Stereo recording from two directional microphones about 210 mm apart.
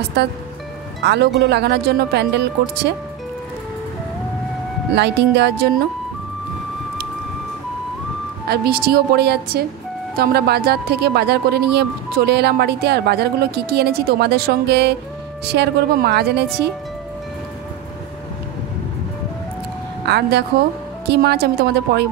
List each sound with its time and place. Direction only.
0.2 s speech: 50° right (ahead or behind)
4.9 s speech: 55° right (ahead or behind)
8.5 s speech: 50° right (ahead or behind)
20.1 s a woman's voice: 50° right (ahead or behind)